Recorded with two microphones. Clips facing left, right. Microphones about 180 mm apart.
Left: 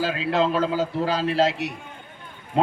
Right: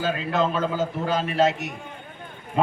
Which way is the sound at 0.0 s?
35° left (ahead or behind).